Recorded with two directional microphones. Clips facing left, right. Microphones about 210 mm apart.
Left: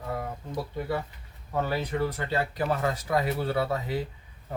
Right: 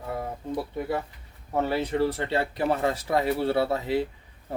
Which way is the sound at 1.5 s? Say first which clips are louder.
Right 3 dB; 25° right (ahead or behind).